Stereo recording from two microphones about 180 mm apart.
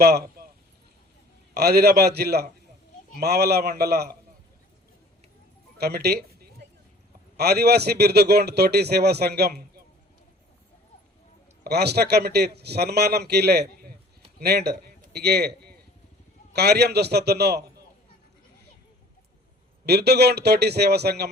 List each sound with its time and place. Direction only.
0.0 s speech: 60° right (ahead or behind)
1.5 s a man's voice: 60° right (ahead or behind)
5.7 s a sound: 60° right (ahead or behind)
7.3 s a man's voice: 60° right (ahead or behind)
11.6 s a man's voice: 65° right (ahead or behind)
19.8 s a man's voice: 65° right (ahead or behind)